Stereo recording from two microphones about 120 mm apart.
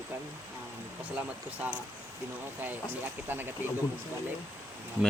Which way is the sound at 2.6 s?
15° right (ahead or behind).